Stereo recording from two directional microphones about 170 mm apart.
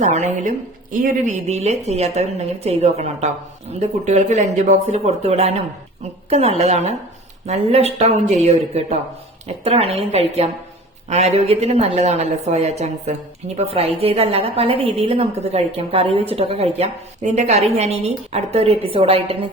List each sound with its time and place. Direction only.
0.0 s a woman's voice: 45° right (ahead or behind)